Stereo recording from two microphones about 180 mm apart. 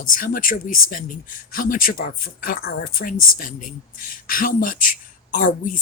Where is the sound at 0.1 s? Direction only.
50° left (ahead or behind).